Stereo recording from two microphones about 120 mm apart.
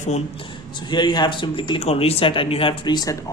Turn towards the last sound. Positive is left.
turn(degrees=35)  # may be behind; listen again after turning